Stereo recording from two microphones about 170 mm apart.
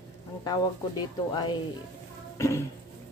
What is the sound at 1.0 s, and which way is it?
Speech, 25° left (ahead or behind).